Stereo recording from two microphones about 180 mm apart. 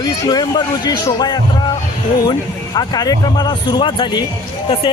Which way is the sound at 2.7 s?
20° left (ahead or behind).